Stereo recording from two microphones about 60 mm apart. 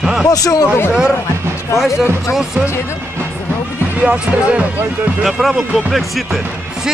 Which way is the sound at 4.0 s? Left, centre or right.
Right.